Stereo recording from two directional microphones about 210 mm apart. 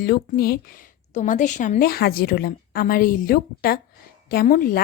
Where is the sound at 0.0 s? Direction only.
45° left (ahead or behind).